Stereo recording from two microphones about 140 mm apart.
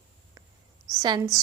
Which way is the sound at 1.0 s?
30° right (ahead or behind).